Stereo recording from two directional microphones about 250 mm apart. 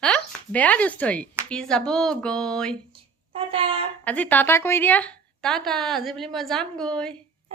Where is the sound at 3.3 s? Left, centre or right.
Right.